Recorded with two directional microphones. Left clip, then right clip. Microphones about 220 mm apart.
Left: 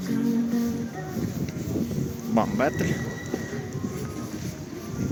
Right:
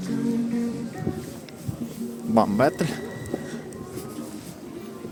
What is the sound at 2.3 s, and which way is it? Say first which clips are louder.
Speech: right 4 dB; 25° right (ahead or behind).